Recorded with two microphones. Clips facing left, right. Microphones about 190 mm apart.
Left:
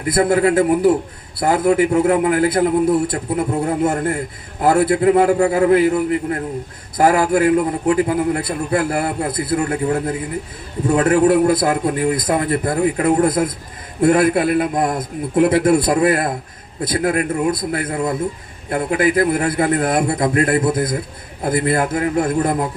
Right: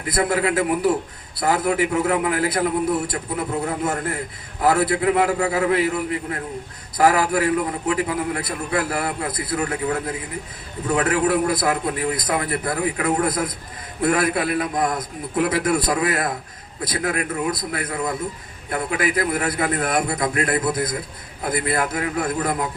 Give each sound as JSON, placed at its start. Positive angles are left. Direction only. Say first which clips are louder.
{"t": 0.1, "sound": "a man's voice", "louder": "left 6 dB", "side_deg": 30}
{"t": 7.2, "sound": "a man's voice", "louder": "left 5 dB", "side_deg": 25}